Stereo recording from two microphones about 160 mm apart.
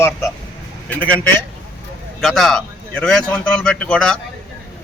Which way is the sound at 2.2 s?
Centre (ahead or behind).